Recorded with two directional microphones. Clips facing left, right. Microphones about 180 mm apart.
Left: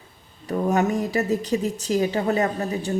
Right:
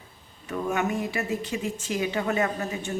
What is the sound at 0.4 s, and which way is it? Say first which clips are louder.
A woman's voice: left 6 dB; 35° left (ahead or behind).